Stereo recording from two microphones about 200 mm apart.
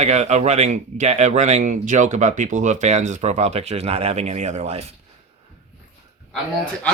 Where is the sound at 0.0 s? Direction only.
35° right (ahead or behind).